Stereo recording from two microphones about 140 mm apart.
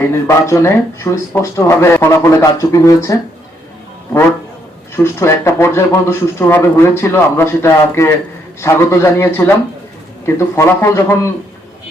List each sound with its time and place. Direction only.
0.3 s speech: 20° left (ahead or behind)
4.9 s speech: 20° left (ahead or behind)